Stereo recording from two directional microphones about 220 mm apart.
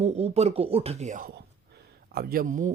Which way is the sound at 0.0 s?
30° right (ahead or behind).